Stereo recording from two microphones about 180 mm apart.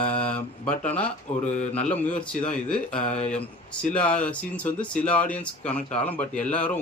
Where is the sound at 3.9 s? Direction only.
5° left (ahead or behind).